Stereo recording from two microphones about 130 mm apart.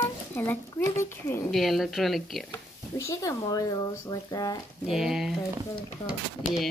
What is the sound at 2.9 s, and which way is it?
Speech, 25° left (ahead or behind).